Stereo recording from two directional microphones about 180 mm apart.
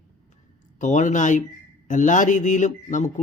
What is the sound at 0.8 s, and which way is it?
Speech, 45° left (ahead or behind).